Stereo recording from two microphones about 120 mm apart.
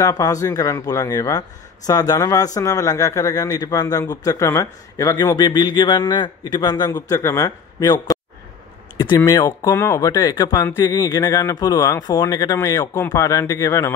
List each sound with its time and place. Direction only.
0.0 s speech: 30° left (ahead or behind)
9.2 s speech: 30° left (ahead or behind)